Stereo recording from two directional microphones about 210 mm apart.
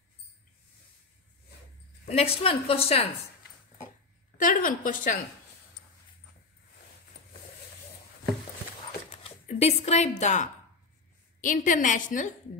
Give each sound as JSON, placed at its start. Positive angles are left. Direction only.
{"t": 2.0, "sound": "a woman's voice", "side_deg": 30}
{"t": 4.4, "sound": "a woman's voice", "side_deg": 40}
{"t": 9.1, "sound": "a woman's voice", "side_deg": 30}